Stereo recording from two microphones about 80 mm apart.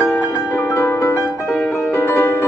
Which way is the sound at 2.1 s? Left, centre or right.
Left.